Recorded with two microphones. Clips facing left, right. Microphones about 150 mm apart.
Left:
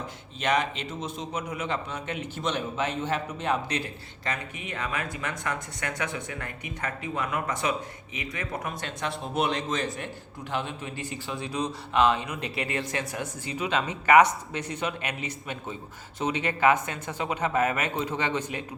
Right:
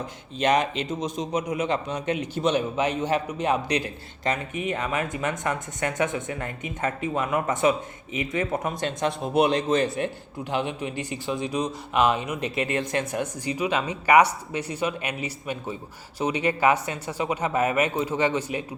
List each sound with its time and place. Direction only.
0.4 s a man's voice: 20° right (ahead or behind)
9.6 s a man's voice: 10° right (ahead or behind)